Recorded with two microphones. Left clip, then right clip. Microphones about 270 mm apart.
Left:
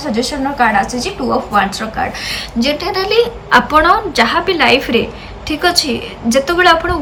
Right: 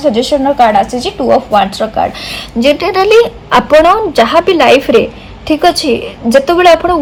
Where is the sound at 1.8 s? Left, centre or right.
Centre.